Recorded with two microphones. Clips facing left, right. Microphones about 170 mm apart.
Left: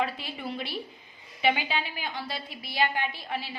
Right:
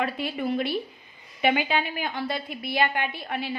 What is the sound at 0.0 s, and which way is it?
A woman's voice, 55° right (ahead or behind).